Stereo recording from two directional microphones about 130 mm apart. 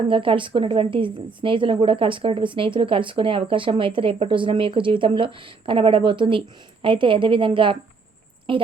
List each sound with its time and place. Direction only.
0.1 s a woman's voice: 40° right (ahead or behind)